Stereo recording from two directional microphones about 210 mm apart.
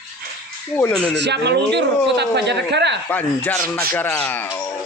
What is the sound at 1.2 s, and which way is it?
Speech, 55° right (ahead or behind).